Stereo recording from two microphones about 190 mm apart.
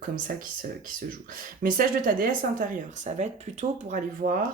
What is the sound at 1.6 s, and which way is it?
Speech, 45° right (ahead or behind).